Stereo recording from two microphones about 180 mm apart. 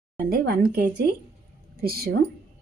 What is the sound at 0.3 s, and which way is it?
A woman's voice, 60° right (ahead or behind).